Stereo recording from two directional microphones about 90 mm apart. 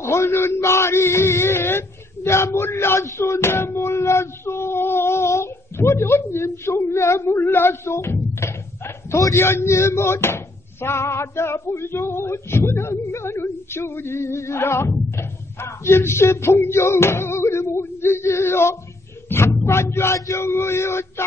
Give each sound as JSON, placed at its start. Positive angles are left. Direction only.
{"t": 0.0, "sound": "speech", "side_deg": 30}
{"t": 19.2, "sound": "a sound", "side_deg": 25}
{"t": 19.6, "sound": "speech", "side_deg": 30}